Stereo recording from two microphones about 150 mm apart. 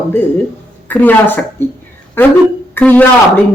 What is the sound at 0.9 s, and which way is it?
Speech, 10° left (ahead or behind).